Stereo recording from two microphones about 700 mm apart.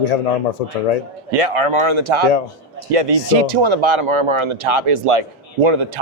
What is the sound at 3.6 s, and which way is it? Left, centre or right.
Speech, right.